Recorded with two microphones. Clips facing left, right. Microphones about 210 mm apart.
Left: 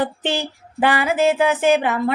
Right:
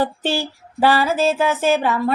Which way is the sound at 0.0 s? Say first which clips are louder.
Right 1 dB; 20° left (ahead or behind).